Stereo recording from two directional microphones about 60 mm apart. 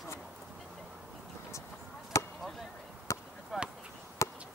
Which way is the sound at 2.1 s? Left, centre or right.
Left.